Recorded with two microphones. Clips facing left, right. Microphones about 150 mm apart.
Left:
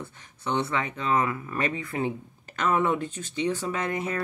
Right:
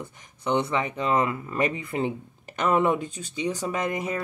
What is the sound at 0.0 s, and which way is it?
Speech, 15° right (ahead or behind).